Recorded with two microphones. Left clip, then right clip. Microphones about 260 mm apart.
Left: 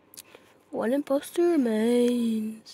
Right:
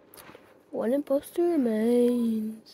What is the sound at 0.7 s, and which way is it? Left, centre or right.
Speech, left.